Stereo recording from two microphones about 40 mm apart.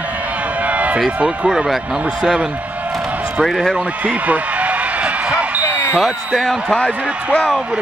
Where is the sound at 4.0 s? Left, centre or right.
Right.